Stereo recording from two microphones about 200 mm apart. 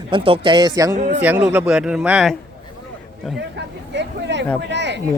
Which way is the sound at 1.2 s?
10° right (ahead or behind).